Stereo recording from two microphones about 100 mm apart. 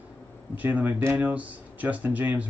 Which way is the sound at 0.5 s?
15° right (ahead or behind).